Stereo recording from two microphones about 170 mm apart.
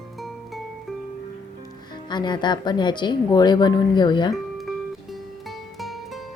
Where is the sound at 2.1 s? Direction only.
25° left (ahead or behind).